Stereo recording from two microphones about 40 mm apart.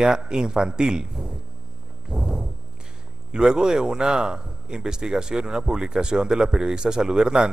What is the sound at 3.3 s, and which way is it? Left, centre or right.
A man's voice, centre.